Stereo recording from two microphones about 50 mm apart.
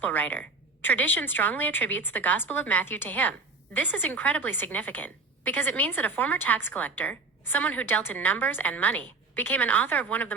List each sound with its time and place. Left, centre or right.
0.0 s a woman's voice: left